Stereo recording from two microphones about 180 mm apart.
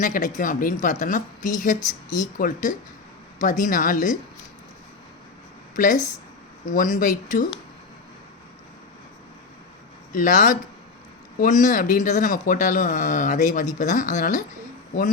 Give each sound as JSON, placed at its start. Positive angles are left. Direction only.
{"t": 0.0, "sound": "speech", "side_deg": 45}
{"t": 1.8, "sound": "speech", "side_deg": 20}
{"t": 2.4, "sound": "speech", "side_deg": 45}
{"t": 5.7, "sound": "speech", "side_deg": 45}
{"t": 10.1, "sound": "speech", "side_deg": 45}